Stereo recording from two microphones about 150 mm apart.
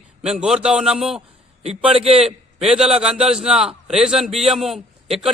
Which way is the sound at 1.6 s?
45° right (ahead or behind).